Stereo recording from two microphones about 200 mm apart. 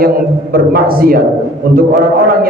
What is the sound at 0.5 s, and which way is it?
A man's voice, 50° right (ahead or behind).